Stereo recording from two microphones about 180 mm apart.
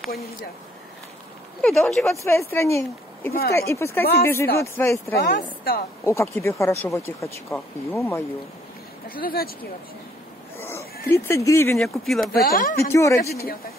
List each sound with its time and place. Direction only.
1.6 s speech: centre (ahead or behind)
2.2 s speech: 15° left (ahead or behind)
5.1 s a woman's voice: 60° left (ahead or behind)
6.0 s speech: 15° left (ahead or behind)
9.1 s a woman's voice: 55° left (ahead or behind)
11.1 s speech: 15° left (ahead or behind)
11.8 s speech: centre (ahead or behind)
12.3 s a woman's voice: 55° left (ahead or behind)
12.9 s speech: 15° left (ahead or behind)